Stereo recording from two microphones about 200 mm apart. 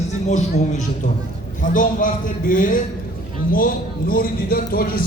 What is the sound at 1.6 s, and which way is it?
A man's voice, 40° left (ahead or behind).